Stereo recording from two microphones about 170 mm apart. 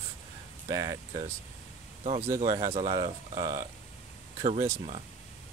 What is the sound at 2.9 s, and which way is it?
Speech, 25° right (ahead or behind).